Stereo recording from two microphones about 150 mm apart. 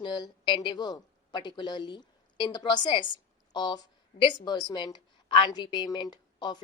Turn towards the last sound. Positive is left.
turn(degrees=30)  # may be behind; listen again after turning